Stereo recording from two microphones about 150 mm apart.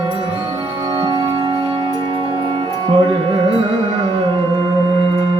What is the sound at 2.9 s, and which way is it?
Music, 35° right (ahead or behind).